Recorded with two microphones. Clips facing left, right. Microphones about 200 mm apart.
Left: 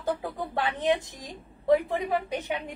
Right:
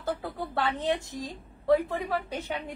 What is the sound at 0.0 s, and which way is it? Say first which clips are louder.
A woman's voice: left 2 dB; 15° left (ahead or behind).